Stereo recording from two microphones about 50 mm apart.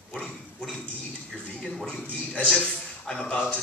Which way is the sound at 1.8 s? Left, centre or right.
Centre.